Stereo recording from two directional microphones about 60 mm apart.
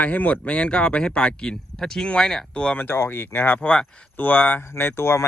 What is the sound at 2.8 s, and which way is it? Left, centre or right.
Speech, left.